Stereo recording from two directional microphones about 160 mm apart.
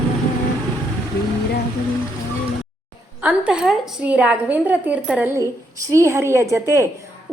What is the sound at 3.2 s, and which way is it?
A woman's voice, 10° right (ahead or behind).